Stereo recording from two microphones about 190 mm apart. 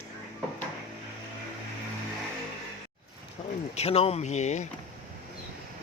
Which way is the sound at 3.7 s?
35° left (ahead or behind).